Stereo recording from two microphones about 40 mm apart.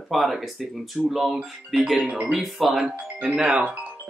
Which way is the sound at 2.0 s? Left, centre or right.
Right.